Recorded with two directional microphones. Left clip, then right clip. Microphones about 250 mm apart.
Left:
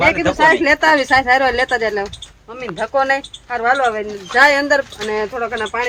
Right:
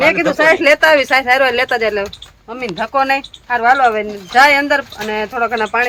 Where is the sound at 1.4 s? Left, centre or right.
Centre.